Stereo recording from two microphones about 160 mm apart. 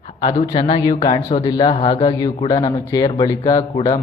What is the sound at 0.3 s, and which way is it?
Speech, 45° left (ahead or behind).